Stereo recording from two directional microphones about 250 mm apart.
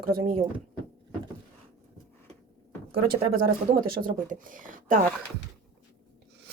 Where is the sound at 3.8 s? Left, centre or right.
Right.